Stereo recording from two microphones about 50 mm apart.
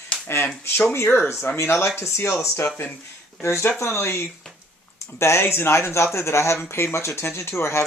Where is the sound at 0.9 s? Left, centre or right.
Left.